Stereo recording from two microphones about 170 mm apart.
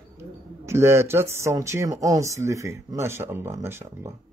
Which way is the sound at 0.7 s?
15° right (ahead or behind).